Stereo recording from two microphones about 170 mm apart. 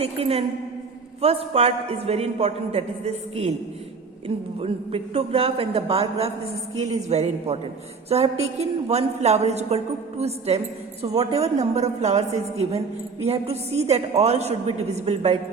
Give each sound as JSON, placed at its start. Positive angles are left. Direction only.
{"t": 0.0, "sound": "a woman's voice", "side_deg": -35}
{"t": 4.6, "sound": "a woman's voice", "side_deg": -35}